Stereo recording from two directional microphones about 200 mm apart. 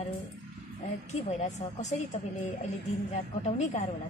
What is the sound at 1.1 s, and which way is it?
Speech, 35° left (ahead or behind).